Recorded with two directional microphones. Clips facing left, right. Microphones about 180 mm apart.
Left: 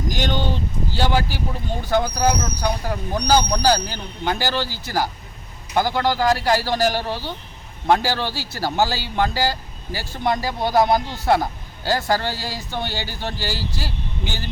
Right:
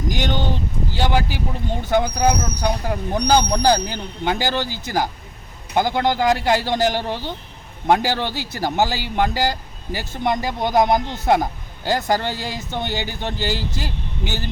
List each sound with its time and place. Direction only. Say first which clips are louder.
0.9 s a man's voice: even; 15° right (ahead or behind)